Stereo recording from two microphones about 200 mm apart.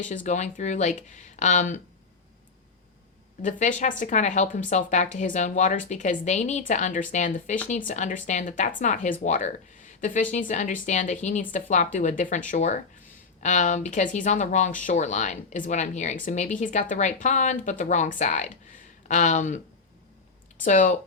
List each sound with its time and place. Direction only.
0.0 s speech: 40° left (ahead or behind)
3.4 s speech: 40° left (ahead or behind)
20.7 s speech: 40° left (ahead or behind)